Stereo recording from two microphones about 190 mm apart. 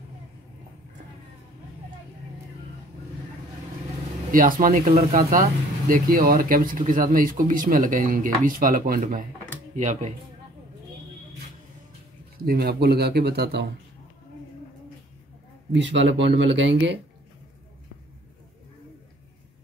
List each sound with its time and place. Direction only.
4.3 s speech: 45° right (ahead or behind)
12.4 s speech: 55° right (ahead or behind)
15.7 s a man's voice: 75° right (ahead or behind)